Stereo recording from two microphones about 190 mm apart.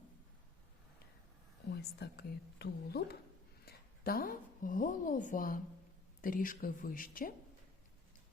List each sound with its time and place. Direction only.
1.7 s a woman's voice: 60° left (ahead or behind)